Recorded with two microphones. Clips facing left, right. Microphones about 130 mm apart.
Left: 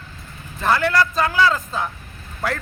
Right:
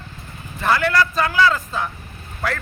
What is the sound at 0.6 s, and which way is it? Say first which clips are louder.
A man's voice: even; centre (ahead or behind).